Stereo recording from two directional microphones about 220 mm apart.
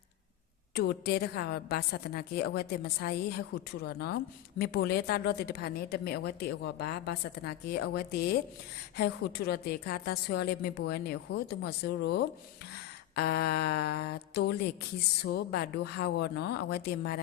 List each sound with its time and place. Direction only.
0.7 s a woman's voice: 45° left (ahead or behind)